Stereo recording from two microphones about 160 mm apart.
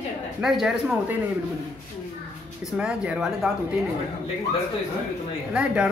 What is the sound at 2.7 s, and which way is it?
Speech, 5° right (ahead or behind).